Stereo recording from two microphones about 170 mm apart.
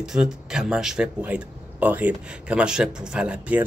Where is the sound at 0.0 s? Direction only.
5° right (ahead or behind).